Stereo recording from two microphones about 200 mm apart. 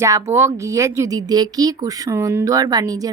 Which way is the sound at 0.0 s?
15° right (ahead or behind).